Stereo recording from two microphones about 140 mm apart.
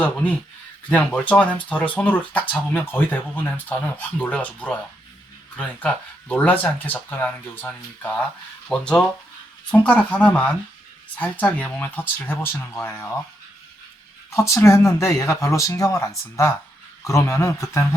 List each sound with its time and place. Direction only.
0.0 s speech: 10° left (ahead or behind)
8.7 s speech: 5° left (ahead or behind)
14.3 s speech: 20° left (ahead or behind)